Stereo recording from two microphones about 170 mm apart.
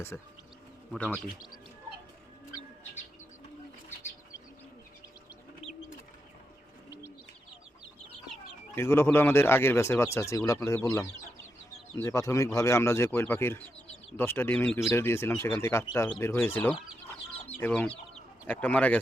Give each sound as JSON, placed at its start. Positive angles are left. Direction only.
{"t": 0.9, "sound": "speech", "side_deg": 10}
{"t": 8.7, "sound": "speech", "side_deg": 15}
{"t": 17.5, "sound": "speech", "side_deg": 10}